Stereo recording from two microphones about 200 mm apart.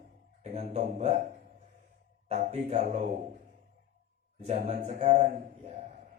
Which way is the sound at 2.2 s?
35° right (ahead or behind).